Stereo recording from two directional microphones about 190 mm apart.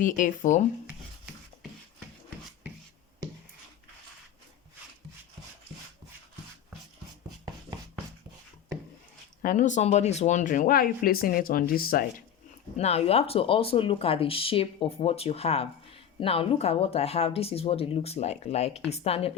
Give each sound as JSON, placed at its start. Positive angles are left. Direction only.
{"t": 0.0, "sound": "speech", "side_deg": 45}
{"t": 9.4, "sound": "speech", "side_deg": 45}
{"t": 12.7, "sound": "speech", "side_deg": 35}